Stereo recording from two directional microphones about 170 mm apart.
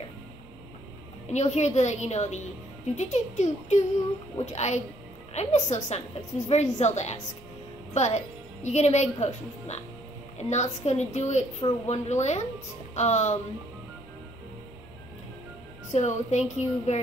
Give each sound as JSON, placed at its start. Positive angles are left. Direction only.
{"t": 1.3, "sound": "a woman's voice", "side_deg": 40}
{"t": 15.9, "sound": "a woman's voice", "side_deg": 45}